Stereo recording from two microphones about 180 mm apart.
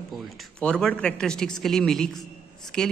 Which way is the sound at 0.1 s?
Centre (ahead or behind).